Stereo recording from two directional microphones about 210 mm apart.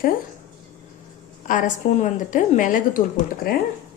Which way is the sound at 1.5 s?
35° left (ahead or behind).